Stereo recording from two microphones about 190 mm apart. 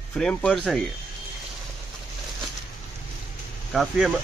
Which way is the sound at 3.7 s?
Centre (ahead or behind).